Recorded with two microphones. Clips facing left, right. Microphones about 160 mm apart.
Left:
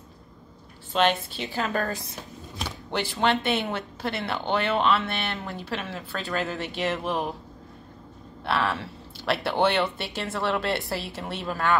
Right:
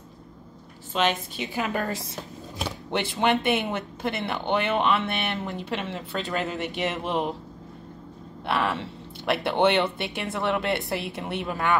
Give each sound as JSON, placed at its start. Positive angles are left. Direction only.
{"t": 1.5, "sound": "a woman's voice", "side_deg": -15}
{"t": 8.5, "sound": "speech", "side_deg": -20}